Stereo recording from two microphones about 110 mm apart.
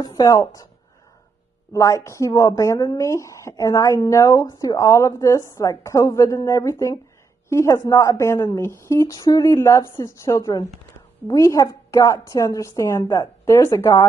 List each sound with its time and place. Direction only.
0.0 s a woman's voice: 35° left (ahead or behind)
1.7 s a woman's voice: 30° left (ahead or behind)